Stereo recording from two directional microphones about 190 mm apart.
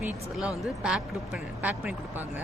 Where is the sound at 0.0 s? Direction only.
5° right (ahead or behind).